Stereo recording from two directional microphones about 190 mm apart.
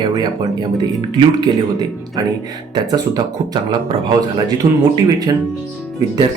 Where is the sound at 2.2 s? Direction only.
20° right (ahead or behind).